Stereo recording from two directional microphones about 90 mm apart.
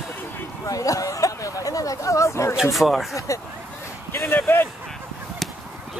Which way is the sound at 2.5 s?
5° right (ahead or behind).